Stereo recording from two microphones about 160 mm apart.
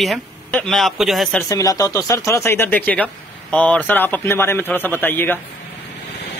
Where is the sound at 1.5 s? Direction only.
20° left (ahead or behind).